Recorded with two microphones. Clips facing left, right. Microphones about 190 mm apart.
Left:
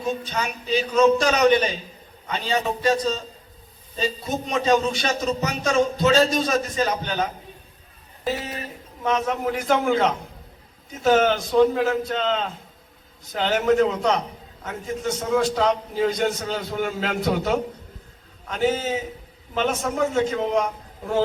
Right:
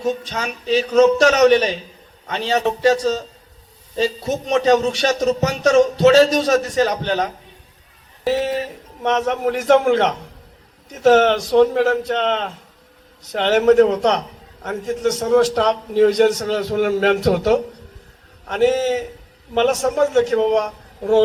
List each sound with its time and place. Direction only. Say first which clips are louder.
0.3 s a man's voice: right 4 dB; 75° right (ahead or behind)